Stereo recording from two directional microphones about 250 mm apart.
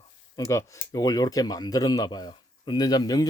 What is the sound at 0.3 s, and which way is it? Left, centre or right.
Speech, centre.